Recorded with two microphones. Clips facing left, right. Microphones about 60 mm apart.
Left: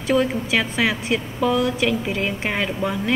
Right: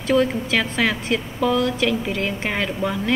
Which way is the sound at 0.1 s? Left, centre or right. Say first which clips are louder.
Right 1 dB; centre.